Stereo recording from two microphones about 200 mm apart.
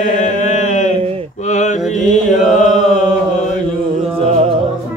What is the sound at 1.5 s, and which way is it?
Mantra, 35° left (ahead or behind).